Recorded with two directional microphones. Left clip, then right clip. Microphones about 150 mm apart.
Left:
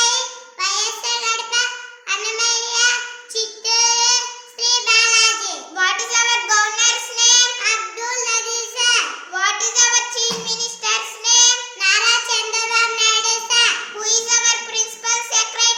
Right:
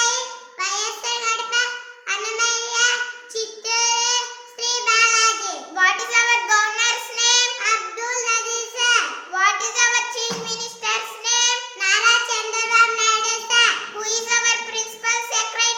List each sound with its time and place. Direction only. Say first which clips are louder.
0.6 s a sound: left 3 dB; 10° left (ahead or behind)
2.0 s child singing: left 2 dB; 10° left (ahead or behind)
5.7 s child singing: right 1 dB; 20° right (ahead or behind)
7.6 s child singing: left 1 dB; 10° left (ahead or behind)
9.3 s child singing: even; 20° right (ahead or behind)
11.8 s child singing: even; 10° left (ahead or behind)
14.0 s child singing: left 3 dB; 20° right (ahead or behind)